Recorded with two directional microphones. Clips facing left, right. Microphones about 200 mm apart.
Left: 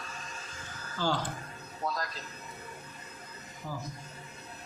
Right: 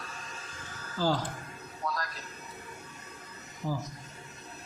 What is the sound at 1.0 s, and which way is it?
Speech, 35° right (ahead or behind).